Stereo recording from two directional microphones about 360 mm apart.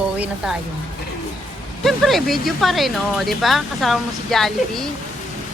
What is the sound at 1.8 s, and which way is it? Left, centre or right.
Speech, centre.